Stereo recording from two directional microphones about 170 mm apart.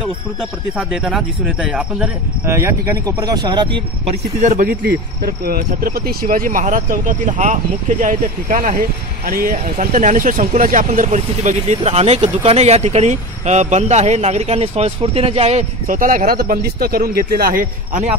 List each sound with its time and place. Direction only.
0.7 s speech: centre (ahead or behind); by 3.8 s 25° right (ahead or behind)
4.4 s speech: 50° right (ahead or behind)